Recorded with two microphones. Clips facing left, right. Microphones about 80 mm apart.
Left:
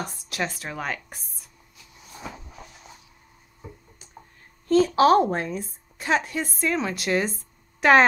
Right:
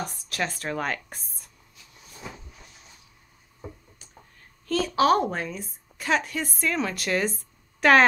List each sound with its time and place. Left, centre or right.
0.3 s speech: centre
4.6 s a woman's voice: left